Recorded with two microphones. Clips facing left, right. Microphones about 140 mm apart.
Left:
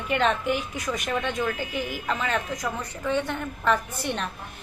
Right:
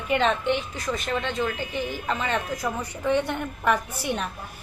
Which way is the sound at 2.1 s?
Centre (ahead or behind).